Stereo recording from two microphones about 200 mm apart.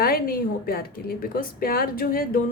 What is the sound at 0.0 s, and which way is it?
A woman's voice, 50° left (ahead or behind).